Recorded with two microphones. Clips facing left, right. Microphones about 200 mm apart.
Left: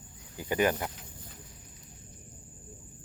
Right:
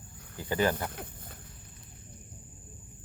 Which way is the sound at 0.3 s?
15° left (ahead or behind).